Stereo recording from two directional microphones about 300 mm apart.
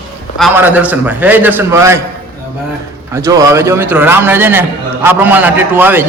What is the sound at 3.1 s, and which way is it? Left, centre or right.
A man's voice, centre.